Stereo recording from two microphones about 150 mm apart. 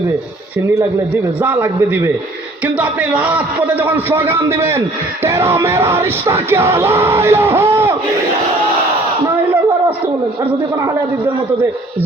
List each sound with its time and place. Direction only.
0.8 s music: 15° right (ahead or behind)